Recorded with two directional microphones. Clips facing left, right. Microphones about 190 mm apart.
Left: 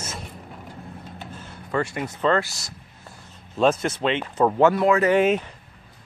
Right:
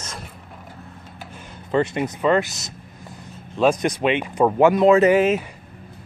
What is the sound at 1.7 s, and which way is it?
Speech, 20° right (ahead or behind).